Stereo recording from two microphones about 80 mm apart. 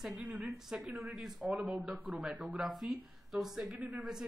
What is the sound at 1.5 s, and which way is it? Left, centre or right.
Speech, centre.